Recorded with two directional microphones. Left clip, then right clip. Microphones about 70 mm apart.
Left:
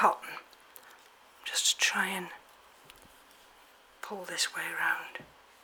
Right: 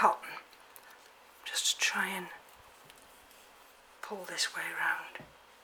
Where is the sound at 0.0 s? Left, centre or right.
Left.